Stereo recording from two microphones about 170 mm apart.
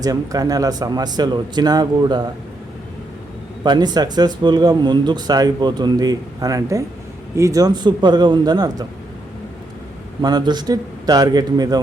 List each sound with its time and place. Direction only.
0.0 s speech: 20° right (ahead or behind)
3.6 s speech: 25° right (ahead or behind)
10.2 s speech: 25° right (ahead or behind)